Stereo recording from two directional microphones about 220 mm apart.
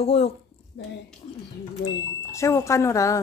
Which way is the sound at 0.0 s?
25° left (ahead or behind).